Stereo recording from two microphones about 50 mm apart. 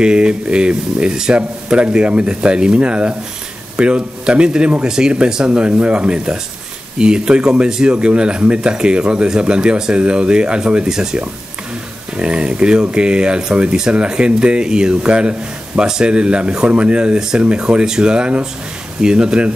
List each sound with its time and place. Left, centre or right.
0.0 s speech: centre
12.2 s speech: right